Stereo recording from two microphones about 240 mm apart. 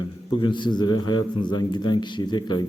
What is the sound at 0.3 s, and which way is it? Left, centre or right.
A man's voice, centre.